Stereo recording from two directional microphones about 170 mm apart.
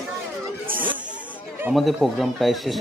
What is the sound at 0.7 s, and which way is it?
Chatter, 55° right (ahead or behind).